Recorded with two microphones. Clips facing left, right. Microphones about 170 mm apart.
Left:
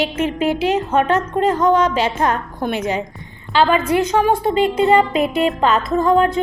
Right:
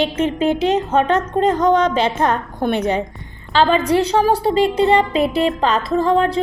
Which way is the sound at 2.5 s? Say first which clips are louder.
Right 3 dB; 55° right (ahead or behind).